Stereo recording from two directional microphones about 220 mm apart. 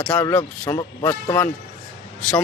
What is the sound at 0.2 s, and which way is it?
Speech, 10° left (ahead or behind).